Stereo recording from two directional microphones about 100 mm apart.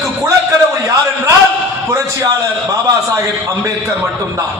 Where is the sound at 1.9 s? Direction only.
35° right (ahead or behind).